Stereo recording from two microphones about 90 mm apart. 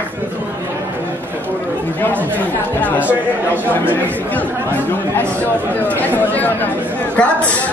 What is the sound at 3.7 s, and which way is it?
Chatter, 20° left (ahead or behind).